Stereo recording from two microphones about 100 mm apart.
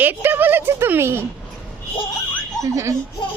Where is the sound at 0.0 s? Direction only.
20° right (ahead or behind).